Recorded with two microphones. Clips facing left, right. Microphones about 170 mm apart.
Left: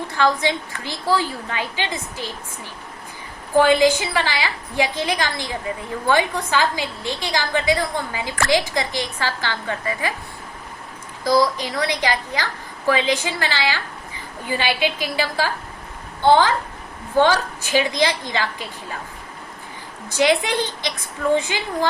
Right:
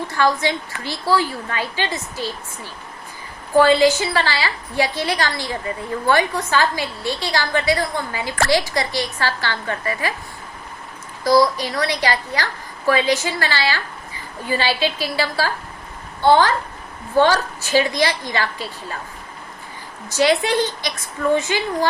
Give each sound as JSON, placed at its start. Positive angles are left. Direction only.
{"t": 0.1, "sound": "a woman's voice", "side_deg": 20}
{"t": 3.6, "sound": "a woman's voice", "side_deg": 15}
{"t": 11.6, "sound": "a woman's voice", "side_deg": 15}
{"t": 17.2, "sound": "a woman's voice", "side_deg": 15}
{"t": 20.1, "sound": "a woman's voice", "side_deg": 15}